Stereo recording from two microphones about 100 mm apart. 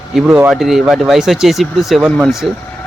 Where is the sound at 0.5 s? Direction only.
5° right (ahead or behind).